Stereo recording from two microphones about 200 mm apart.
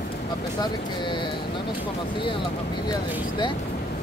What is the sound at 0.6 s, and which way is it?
Speech, 25° left (ahead or behind).